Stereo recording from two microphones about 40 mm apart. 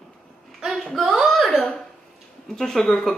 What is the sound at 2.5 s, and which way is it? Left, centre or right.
Speech, centre.